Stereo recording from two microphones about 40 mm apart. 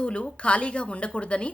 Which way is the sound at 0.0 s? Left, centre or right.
Left.